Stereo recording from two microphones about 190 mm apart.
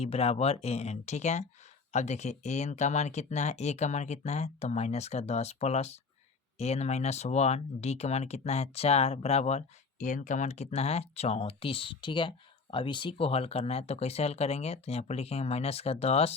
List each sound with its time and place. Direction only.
0.0 s speech: 30° left (ahead or behind)